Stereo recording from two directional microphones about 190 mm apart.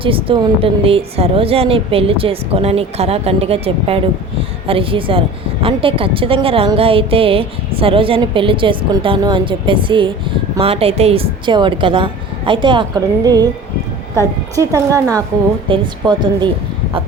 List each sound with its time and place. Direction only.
0.0 s a woman's voice: 30° right (ahead or behind)